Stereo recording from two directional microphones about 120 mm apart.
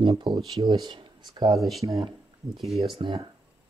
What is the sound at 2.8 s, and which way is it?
Speech, 45° right (ahead or behind).